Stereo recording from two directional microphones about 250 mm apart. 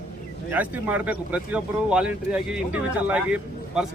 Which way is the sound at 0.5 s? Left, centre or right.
Centre.